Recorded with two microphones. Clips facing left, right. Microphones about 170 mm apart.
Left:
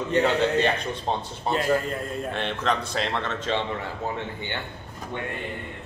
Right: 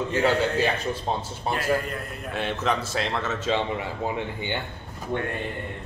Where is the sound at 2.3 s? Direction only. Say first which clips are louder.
Right 2 dB; 5° right (ahead or behind).